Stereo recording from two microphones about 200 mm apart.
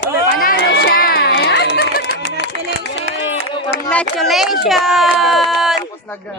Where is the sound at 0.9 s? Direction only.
50° left (ahead or behind).